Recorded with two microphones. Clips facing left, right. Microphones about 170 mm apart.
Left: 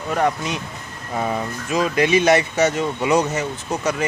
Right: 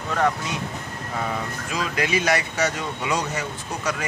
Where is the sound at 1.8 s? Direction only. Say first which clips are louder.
Left 7 dB; 25° left (ahead or behind).